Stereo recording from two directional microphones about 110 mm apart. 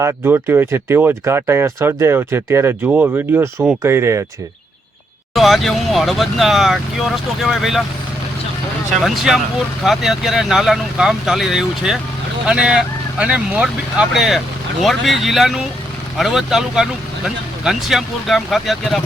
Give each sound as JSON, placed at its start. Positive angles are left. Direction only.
{"t": 0.3, "sound": "speech", "side_deg": -20}
{"t": 5.3, "sound": "speech", "side_deg": 0}
{"t": 9.0, "sound": "speech", "side_deg": -5}